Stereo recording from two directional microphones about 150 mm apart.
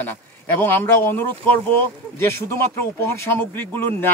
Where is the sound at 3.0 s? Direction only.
15° left (ahead or behind).